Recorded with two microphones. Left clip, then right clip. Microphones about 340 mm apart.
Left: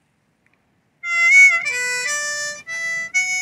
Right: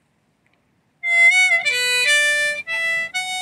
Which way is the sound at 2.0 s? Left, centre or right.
Right.